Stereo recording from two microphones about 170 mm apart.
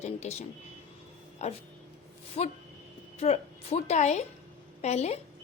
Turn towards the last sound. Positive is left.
turn(degrees=40)  # may be behind; listen again after turning